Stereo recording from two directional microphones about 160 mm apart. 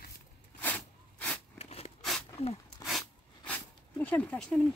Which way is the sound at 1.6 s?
40° left (ahead or behind).